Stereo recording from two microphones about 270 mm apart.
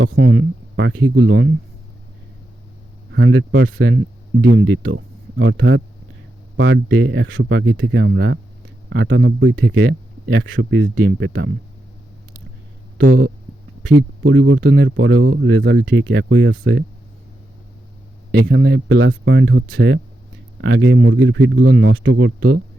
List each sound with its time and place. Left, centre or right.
0.2 s speech: right
3.1 s speech: right
13.1 s speech: right
18.3 s speech: right